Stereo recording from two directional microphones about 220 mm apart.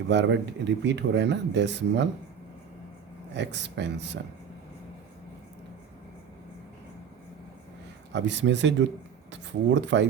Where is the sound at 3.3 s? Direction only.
50° right (ahead or behind).